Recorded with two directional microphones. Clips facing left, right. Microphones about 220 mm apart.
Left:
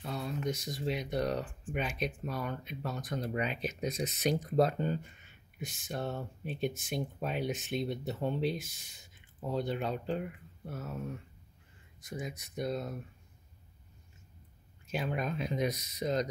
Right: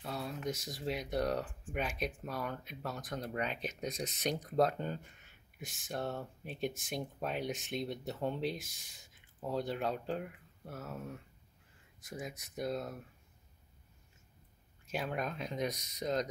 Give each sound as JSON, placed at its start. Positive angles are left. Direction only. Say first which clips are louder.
{"t": 0.0, "sound": "speech", "louder": "left 3 dB", "side_deg": -5}
{"t": 12.0, "sound": "speech", "louder": "left 3 dB", "side_deg": 0}
{"t": 14.9, "sound": "speech", "louder": "left 3 dB", "side_deg": 0}